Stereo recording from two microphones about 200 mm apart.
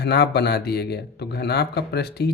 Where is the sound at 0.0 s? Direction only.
55° left (ahead or behind).